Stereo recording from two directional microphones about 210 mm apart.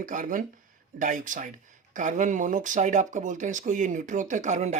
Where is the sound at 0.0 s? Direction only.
40° right (ahead or behind).